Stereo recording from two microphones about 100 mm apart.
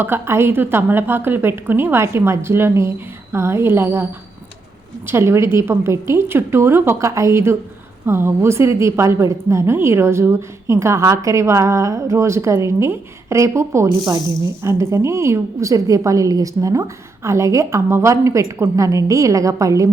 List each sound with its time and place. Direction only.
0.0 s a woman's voice: 25° right (ahead or behind)
5.0 s a woman's voice: 25° right (ahead or behind)